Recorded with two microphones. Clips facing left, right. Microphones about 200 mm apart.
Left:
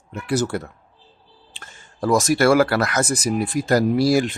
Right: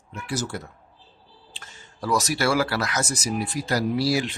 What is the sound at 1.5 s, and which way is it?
Speech, 50° left (ahead or behind).